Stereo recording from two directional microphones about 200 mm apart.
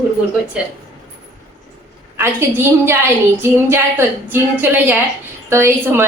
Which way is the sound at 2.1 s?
10° right (ahead or behind).